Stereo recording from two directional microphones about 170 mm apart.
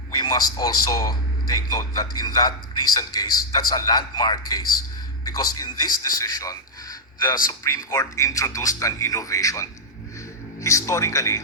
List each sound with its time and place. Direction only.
0.2 s a man's voice: 20° left (ahead or behind)